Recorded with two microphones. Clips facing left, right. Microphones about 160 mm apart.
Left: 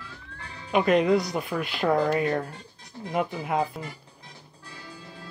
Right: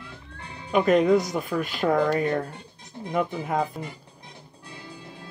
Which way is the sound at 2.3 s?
25° right (ahead or behind).